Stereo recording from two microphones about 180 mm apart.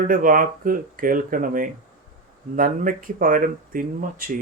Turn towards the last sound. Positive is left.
turn(degrees=-50)  # may be behind; listen again after turning